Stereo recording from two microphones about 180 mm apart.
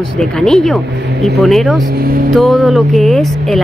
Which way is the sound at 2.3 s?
Centre (ahead or behind).